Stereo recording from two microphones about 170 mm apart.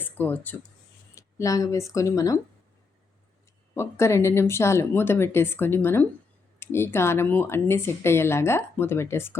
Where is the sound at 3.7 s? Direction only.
15° left (ahead or behind).